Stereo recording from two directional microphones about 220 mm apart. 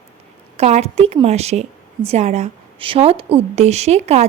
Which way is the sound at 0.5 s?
30° right (ahead or behind).